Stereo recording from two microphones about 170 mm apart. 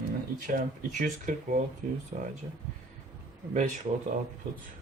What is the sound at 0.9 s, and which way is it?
Speech, 50° right (ahead or behind).